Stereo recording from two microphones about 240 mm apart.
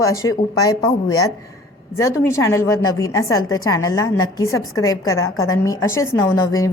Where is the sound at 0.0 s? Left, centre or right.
Centre.